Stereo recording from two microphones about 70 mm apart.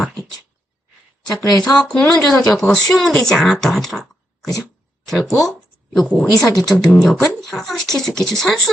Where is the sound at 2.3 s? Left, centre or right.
Left.